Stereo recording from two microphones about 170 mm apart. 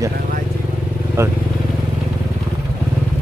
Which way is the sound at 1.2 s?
15° right (ahead or behind).